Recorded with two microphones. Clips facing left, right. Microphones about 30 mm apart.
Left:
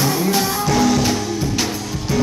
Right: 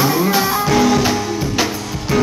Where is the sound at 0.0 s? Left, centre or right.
Centre.